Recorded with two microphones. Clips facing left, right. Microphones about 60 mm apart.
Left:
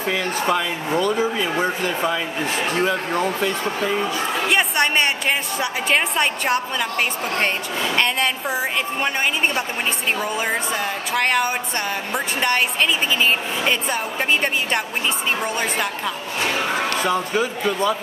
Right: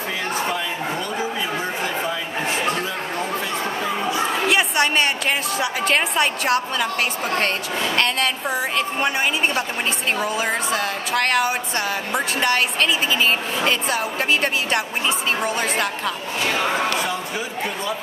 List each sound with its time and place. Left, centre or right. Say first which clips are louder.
3.6 s speech: left 1 dB; centre
4.5 s a woman's voice: left 1 dB; centre
10.1 s a woman's voice: even; centre
13.7 s a woman's voice: even; centre
16.4 s speech: right 1 dB; centre
17.0 s speech: left 5 dB; left